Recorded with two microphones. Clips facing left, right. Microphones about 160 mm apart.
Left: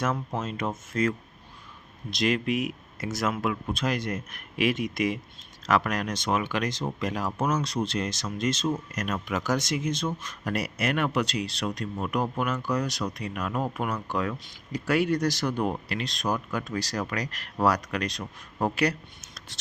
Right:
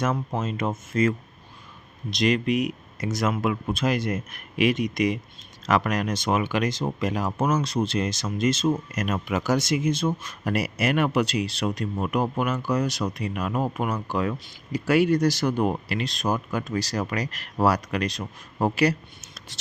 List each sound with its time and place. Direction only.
0.3 s speech: centre (ahead or behind)